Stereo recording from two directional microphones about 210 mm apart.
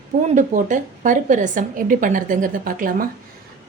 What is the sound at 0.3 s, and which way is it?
A woman's voice, 35° right (ahead or behind).